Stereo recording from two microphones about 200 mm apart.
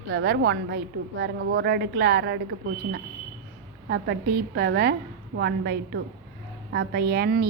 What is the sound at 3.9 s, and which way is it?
A woman's voice, 50° right (ahead or behind).